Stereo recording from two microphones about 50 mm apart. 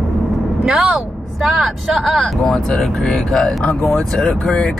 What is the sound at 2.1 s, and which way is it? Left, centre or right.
Speech, centre.